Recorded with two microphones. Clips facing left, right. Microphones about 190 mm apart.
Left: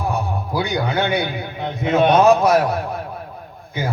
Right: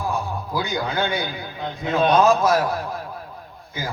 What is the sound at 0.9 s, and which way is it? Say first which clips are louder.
A man's voice: left 4 dB; 20° left (ahead or behind).